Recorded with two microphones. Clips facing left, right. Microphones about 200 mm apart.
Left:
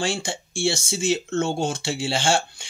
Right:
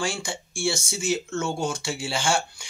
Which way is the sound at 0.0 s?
25° left (ahead or behind).